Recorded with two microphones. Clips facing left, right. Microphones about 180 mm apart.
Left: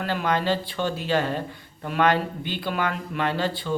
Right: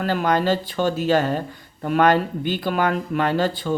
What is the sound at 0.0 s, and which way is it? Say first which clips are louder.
Speech: right 4 dB; 45° right (ahead or behind).